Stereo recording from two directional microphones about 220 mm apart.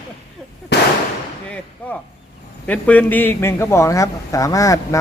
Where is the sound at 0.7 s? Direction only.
50° left (ahead or behind).